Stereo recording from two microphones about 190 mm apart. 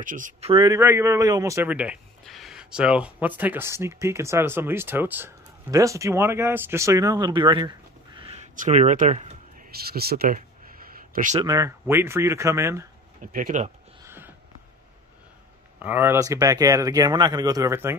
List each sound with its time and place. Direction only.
0.0 s speech: 45° right (ahead or behind)
0.5 s speech: 25° right (ahead or behind)
0.7 s a man's voice: 15° right (ahead or behind)
8.5 s speech: 40° right (ahead or behind)
9.9 s speech: 55° right (ahead or behind)
10.9 s a sound: 45° right (ahead or behind)
11.4 s a man's voice: 15° right (ahead or behind)
13.2 s speech: 45° right (ahead or behind)
14.0 s a sound: 10° right (ahead or behind)
15.8 s a man's voice: 10° right (ahead or behind)